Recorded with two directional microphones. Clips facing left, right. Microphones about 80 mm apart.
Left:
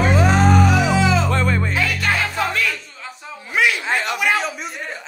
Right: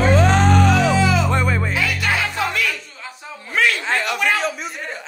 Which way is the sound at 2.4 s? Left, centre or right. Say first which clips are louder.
Left 1 dB; left.